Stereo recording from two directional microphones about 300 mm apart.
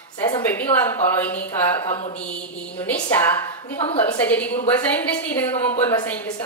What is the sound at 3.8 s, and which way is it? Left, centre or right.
Mantra, centre.